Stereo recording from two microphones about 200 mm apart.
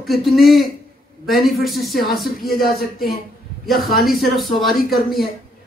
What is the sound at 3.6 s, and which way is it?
A man's voice, centre (ahead or behind).